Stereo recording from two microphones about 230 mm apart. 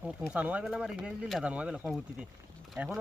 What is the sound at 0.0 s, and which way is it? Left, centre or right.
Speech, centre.